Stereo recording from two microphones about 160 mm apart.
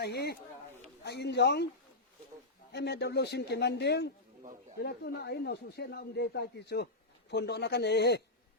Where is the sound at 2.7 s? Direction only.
90° left.